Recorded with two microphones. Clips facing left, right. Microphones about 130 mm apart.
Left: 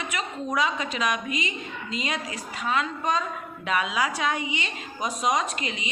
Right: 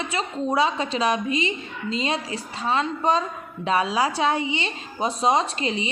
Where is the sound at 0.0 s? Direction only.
30° right (ahead or behind).